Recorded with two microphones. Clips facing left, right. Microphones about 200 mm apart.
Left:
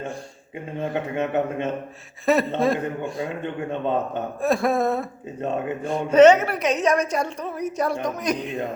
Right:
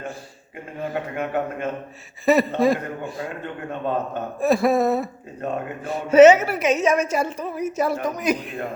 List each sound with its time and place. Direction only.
0.8 s a man's voice: 25° left (ahead or behind)
2.2 s a woman's voice: centre (ahead or behind)
4.4 s a woman's voice: centre (ahead or behind)